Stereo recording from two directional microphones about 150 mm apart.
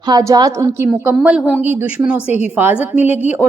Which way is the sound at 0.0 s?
25° right (ahead or behind).